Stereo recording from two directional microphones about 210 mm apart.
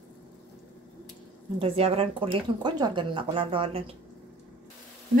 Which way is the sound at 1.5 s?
25° right (ahead or behind).